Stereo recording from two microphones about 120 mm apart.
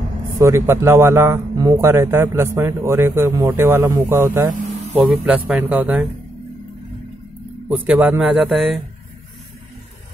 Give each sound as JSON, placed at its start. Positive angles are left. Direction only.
{"t": 0.4, "sound": "speech", "side_deg": -25}
{"t": 5.1, "sound": "speech", "side_deg": -5}
{"t": 7.7, "sound": "speech", "side_deg": -15}